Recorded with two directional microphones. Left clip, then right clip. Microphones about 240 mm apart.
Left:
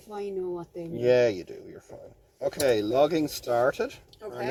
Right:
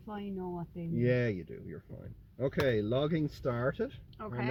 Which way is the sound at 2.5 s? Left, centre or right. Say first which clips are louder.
Left 7 dB; centre.